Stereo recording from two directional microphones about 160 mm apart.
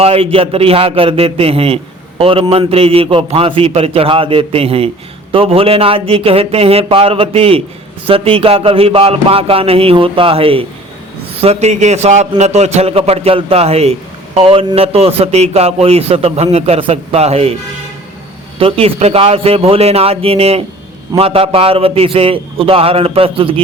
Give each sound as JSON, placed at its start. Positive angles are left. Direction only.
{"t": 0.0, "sound": "a man's voice", "side_deg": -35}
{"t": 18.6, "sound": "a man's voice", "side_deg": -40}